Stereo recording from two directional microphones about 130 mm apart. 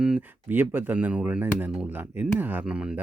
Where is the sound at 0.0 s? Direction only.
10° right (ahead or behind).